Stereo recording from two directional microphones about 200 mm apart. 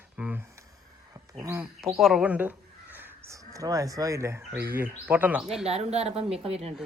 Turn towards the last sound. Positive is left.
turn(degrees=-30)  # may be behind; listen again after turning